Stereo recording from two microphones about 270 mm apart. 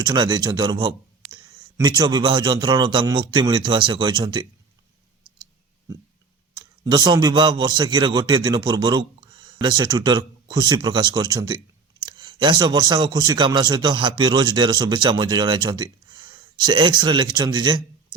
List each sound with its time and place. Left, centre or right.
0.0 s speech: centre
6.6 s speech: centre